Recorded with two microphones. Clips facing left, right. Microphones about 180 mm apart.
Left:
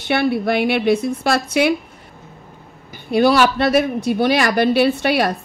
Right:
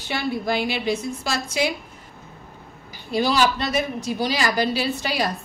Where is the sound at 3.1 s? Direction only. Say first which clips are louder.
Left 6 dB; 60° left (ahead or behind).